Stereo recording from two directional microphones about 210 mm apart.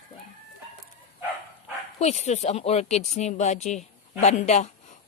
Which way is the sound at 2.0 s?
30° left (ahead or behind).